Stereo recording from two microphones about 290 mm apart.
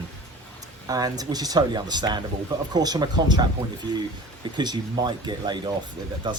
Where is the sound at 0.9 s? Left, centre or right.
Centre.